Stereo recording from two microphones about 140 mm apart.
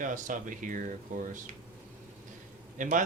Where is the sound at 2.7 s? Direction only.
70° right (ahead or behind).